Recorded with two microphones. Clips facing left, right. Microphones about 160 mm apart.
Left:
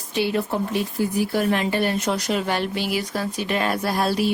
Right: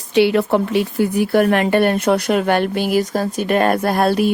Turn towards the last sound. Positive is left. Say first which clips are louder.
# right 6 dB
turn(degrees=-55)  # may be behind; listen again after turning